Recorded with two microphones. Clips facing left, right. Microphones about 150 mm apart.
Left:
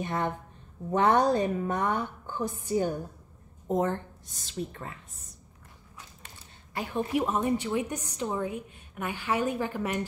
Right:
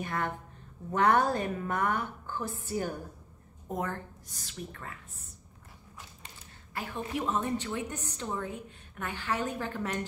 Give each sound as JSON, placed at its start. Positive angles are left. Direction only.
{"t": 0.0, "sound": "a woman's voice", "side_deg": 20}
{"t": 6.7, "sound": "a woman's voice", "side_deg": 15}